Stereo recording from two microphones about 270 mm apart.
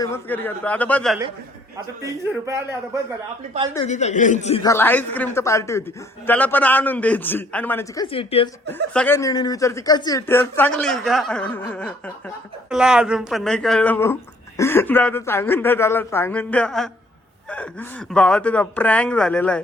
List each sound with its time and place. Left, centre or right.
0.0 s speech: centre
2.0 s a man's voice: centre
3.8 s a man's voice: left
4.6 s speech: centre
8.0 s a man's voice: centre
8.9 s speech: centre